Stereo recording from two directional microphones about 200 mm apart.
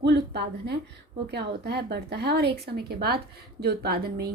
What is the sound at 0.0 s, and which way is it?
A woman's voice, 55° right (ahead or behind).